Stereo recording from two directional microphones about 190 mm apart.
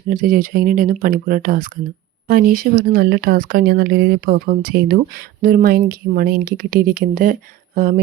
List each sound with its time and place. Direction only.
0.1 s speech: 45° right (ahead or behind)